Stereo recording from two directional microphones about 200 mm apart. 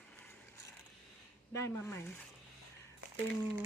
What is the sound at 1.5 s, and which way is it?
Speech, 15° left (ahead or behind).